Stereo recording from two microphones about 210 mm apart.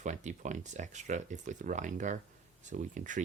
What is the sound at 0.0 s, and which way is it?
Speech, 35° right (ahead or behind).